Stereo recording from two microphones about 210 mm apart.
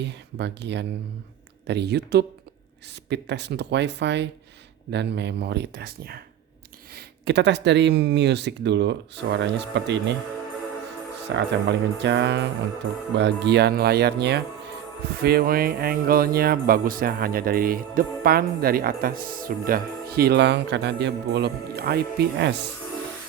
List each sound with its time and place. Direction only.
0.0 s speech: 55° right (ahead or behind)
11.3 s speech: 55° right (ahead or behind)